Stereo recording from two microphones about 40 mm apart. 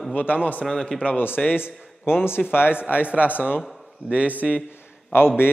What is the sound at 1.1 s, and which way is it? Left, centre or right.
A man's voice, left.